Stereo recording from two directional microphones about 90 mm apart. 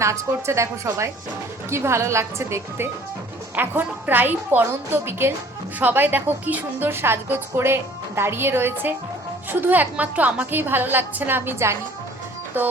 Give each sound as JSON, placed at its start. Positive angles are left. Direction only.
{"t": 0.0, "sound": "a woman's voice", "side_deg": -30}